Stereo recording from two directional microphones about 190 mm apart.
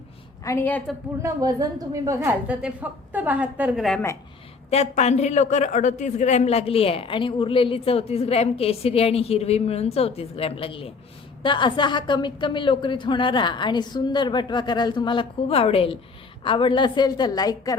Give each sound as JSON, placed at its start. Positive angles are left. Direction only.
{"t": 0.4, "sound": "a woman's voice", "side_deg": 10}
{"t": 1.2, "sound": "a woman's voice", "side_deg": -20}
{"t": 4.7, "sound": "a woman's voice", "side_deg": 35}